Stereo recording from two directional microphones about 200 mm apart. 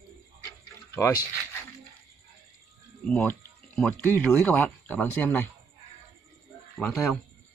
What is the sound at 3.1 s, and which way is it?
Speech, 5° left (ahead or behind).